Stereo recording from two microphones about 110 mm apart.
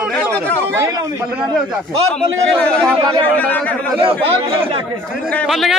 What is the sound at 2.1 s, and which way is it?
Speech, 10° left (ahead or behind).